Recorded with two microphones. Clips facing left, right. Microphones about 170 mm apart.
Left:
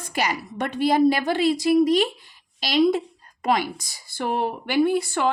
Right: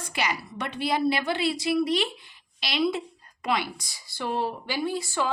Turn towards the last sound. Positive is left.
turn(degrees=55)  # may be behind; listen again after turning